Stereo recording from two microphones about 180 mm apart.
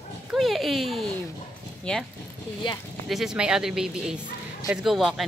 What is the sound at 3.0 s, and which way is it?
Speech, centre (ahead or behind).